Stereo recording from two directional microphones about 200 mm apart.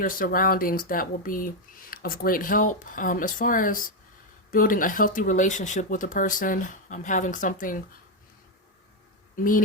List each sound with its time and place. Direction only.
0.0 s speech: 45° left (ahead or behind)
9.3 s speech: 45° left (ahead or behind)